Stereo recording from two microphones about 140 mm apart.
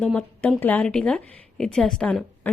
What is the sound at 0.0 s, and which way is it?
A woman's voice, 10° left (ahead or behind).